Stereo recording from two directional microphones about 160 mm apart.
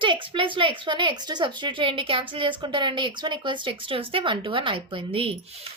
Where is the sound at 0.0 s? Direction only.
30° right (ahead or behind).